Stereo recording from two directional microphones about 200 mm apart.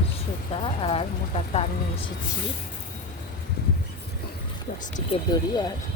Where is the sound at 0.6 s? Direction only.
30° left (ahead or behind).